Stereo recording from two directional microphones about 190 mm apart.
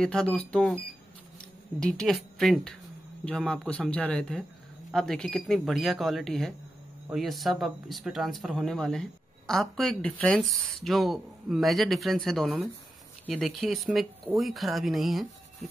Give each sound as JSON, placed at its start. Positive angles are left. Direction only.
{"t": 0.0, "sound": "speech", "side_deg": 5}